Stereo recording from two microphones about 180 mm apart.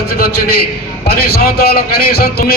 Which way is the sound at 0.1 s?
55° left (ahead or behind).